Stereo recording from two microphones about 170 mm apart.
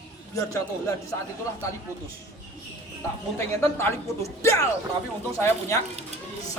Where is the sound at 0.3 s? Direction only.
20° left (ahead or behind).